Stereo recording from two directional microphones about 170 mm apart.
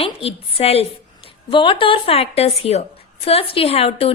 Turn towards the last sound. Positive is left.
turn(degrees=35)  # may be behind; listen again after turning